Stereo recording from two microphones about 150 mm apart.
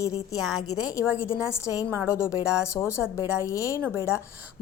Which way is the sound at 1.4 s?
20° left (ahead or behind).